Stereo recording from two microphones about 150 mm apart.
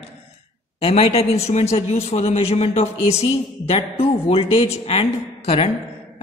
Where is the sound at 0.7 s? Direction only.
40° left (ahead or behind).